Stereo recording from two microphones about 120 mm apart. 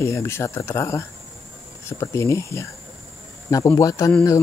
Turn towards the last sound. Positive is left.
turn(degrees=25)  # may be behind; listen again after turning